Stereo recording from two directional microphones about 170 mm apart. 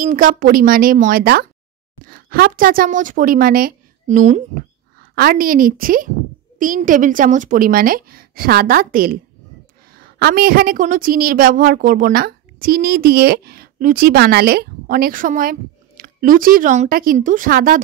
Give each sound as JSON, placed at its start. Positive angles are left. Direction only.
{"t": 0.0, "sound": "a woman's voice", "side_deg": -55}
{"t": 5.1, "sound": "a woman's voice", "side_deg": -60}